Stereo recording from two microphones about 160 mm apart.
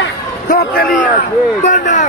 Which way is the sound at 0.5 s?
70° left (ahead or behind).